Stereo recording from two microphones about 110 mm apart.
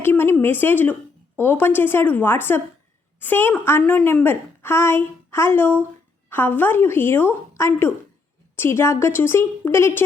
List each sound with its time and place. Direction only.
0.0 s a woman's voice: 20° left (ahead or behind)